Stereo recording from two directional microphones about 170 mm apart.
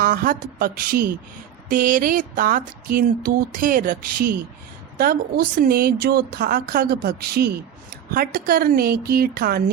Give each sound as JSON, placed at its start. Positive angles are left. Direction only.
{"t": 0.0, "sound": "a woman's voice", "side_deg": -55}